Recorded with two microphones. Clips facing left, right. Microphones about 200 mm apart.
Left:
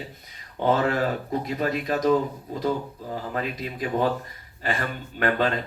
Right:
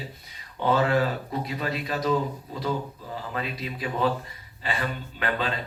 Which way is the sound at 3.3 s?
45° left (ahead or behind).